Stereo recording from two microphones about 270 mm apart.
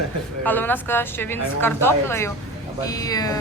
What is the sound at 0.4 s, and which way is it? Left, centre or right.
Speech, centre.